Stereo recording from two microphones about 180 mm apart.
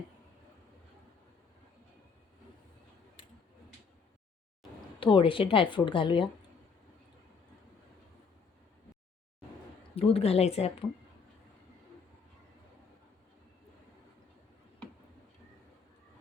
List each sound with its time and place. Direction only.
4.9 s a woman's voice: 30° left (ahead or behind)
9.9 s speech: 30° left (ahead or behind)